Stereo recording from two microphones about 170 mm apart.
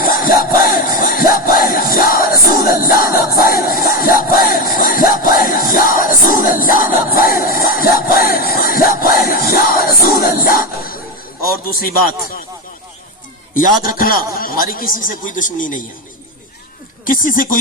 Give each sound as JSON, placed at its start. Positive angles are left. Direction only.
{"t": 0.0, "sound": "music", "side_deg": 55}
{"t": 2.8, "sound": "crowd", "side_deg": 60}
{"t": 11.7, "sound": "speech", "side_deg": 60}
{"t": 13.5, "sound": "speech", "side_deg": 55}
{"t": 17.1, "sound": "speech", "side_deg": 55}